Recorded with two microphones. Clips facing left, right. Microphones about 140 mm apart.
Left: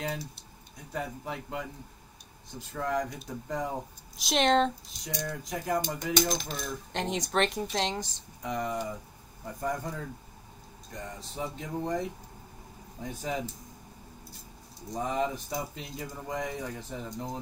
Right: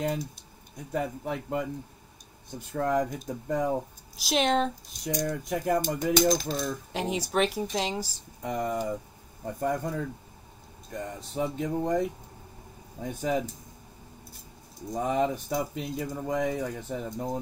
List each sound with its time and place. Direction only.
0.0 s speech: 50° right (ahead or behind)
2.7 s speech: 50° right (ahead or behind)
4.2 s speech: centre (ahead or behind)
5.0 s speech: 45° right (ahead or behind)
6.9 s speech: 5° right (ahead or behind)
8.4 s speech: 50° right (ahead or behind)
15.0 s speech: 55° right (ahead or behind)